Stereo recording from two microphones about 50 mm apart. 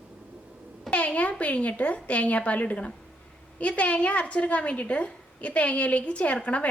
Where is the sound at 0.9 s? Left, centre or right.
Left.